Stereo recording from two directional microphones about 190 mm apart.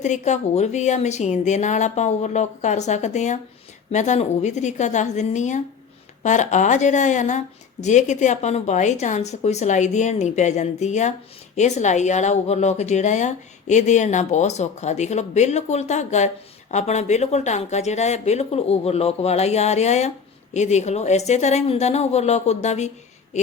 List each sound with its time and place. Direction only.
0.0 s speech: 40° left (ahead or behind)